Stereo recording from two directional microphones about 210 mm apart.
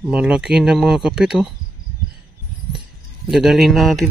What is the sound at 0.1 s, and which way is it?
Speech, 5° right (ahead or behind).